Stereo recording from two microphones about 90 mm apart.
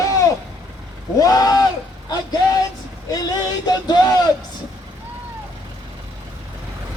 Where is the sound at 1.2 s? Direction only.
45° left (ahead or behind).